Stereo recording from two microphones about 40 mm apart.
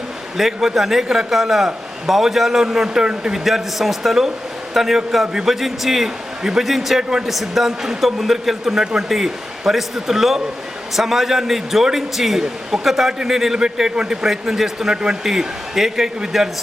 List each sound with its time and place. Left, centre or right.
0.3 s a man's voice: centre
14.3 s a man's voice: centre